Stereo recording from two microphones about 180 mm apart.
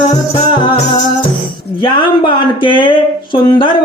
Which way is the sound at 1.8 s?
25° left (ahead or behind).